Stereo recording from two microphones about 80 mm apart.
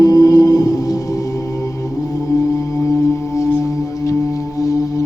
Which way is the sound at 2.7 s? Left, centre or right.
Left.